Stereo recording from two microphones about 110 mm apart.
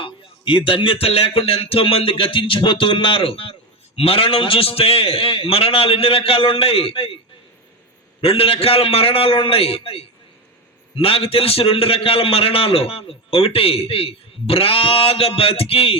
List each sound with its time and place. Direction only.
0.0 s a man's voice: 50° left (ahead or behind)
8.2 s a man's voice: 60° left (ahead or behind)